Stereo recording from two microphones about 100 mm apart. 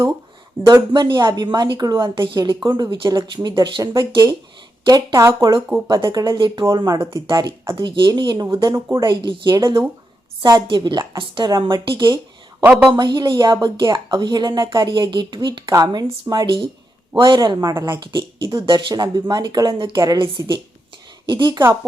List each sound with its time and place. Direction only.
0.7 s a woman's voice: 45° right (ahead or behind)
7.8 s a woman's voice: 50° right (ahead or behind)
9.0 s a woman's voice: 50° right (ahead or behind)
18.0 s a woman's voice: 50° right (ahead or behind)